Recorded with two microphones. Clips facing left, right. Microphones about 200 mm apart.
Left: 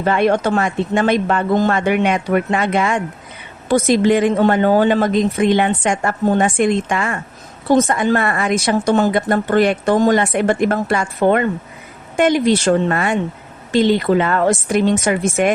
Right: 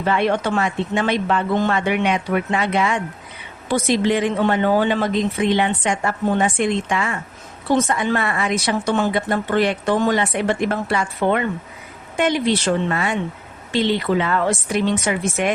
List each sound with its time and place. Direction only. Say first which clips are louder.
0.0 s a woman's voice: left 4 dB; 45° left (ahead or behind)